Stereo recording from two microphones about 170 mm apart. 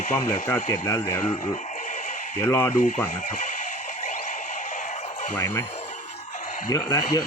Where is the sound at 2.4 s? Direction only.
15° left (ahead or behind).